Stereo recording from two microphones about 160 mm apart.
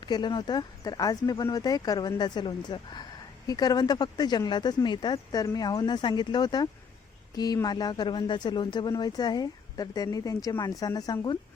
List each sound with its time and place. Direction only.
0.0 s speech: 25° left (ahead or behind)